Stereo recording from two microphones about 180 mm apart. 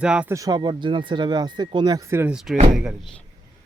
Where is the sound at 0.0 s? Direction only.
5° right (ahead or behind).